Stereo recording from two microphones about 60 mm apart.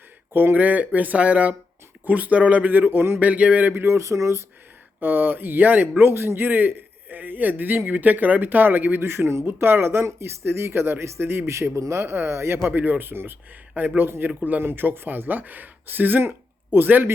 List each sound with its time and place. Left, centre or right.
0.3 s speech: right
3.2 s speech: right
3.8 s speech: right
4.9 s a man's voice: right
12.6 s a man's voice: right